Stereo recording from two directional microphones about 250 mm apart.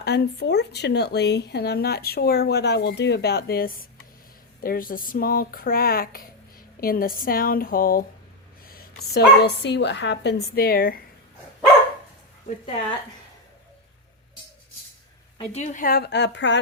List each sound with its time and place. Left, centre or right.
0.0 s a woman's voice: left
15.4 s speech: left